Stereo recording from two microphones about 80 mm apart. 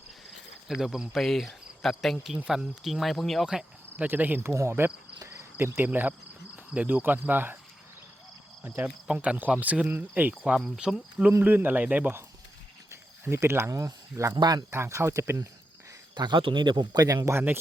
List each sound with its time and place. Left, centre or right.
0.3 s cricket: centre
2.2 s speech: centre
3.9 s speech: right
5.2 s cricket: right
6.7 s speech: right
8.8 s speech: centre
11.3 s speech: right
12.9 s speech: right
16.1 s speech: right
17.3 s speech: right